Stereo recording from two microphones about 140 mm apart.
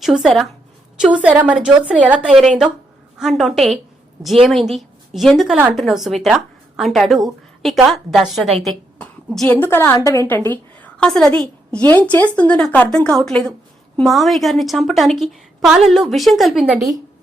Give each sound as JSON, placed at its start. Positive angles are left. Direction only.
{"t": 0.0, "sound": "a woman's voice", "side_deg": 0}
{"t": 9.0, "sound": "a sound", "side_deg": 5}
{"t": 9.5, "sound": "a woman's voice", "side_deg": 15}